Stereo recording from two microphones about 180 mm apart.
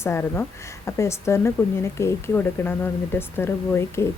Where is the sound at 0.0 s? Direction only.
15° left (ahead or behind).